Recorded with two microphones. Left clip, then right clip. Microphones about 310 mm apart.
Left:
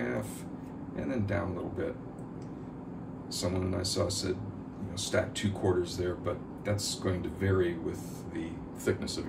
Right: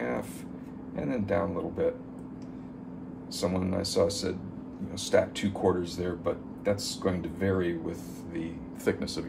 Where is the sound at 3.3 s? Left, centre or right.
Right.